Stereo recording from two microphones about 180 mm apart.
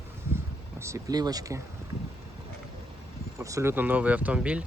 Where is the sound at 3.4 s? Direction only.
15° right (ahead or behind).